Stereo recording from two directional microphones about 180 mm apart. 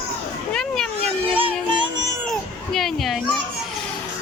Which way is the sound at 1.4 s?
30° right (ahead or behind).